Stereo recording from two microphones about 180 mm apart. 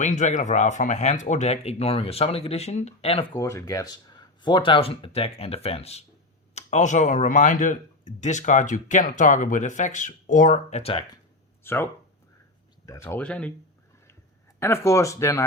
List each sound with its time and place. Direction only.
0.0 s speech: 40° left (ahead or behind)
3.4 s speech: 20° left (ahead or behind)
11.6 s speech: 15° left (ahead or behind)
14.6 s speech: 15° left (ahead or behind)